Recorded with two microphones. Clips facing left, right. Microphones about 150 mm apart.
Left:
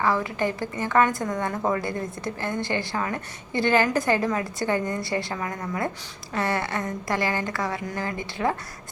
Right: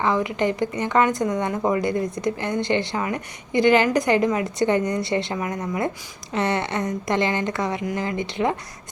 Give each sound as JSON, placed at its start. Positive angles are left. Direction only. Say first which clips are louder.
{"t": 0.0, "sound": "a woman's voice", "louder": "right 3 dB", "side_deg": -20}